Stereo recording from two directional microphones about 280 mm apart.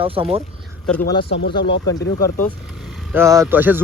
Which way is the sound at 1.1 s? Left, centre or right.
Centre.